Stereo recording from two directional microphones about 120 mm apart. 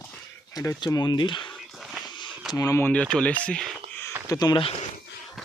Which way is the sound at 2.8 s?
10° left (ahead or behind).